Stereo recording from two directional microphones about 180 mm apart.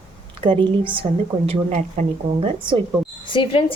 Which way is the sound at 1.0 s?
25° right (ahead or behind).